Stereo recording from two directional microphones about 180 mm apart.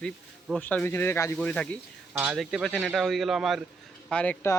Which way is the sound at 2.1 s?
5° right (ahead or behind).